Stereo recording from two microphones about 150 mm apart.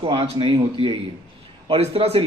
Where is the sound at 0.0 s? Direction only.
35° right (ahead or behind).